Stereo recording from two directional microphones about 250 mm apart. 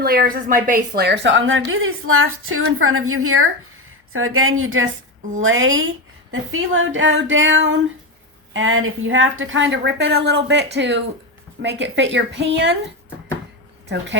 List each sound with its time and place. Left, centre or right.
0.0 s a woman's voice: right
13.8 s a woman's voice: right